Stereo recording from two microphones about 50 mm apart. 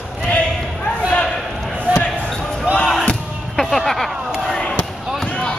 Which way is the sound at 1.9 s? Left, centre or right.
Right.